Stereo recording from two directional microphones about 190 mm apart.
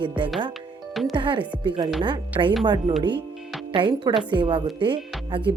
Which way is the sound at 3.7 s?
25° right (ahead or behind).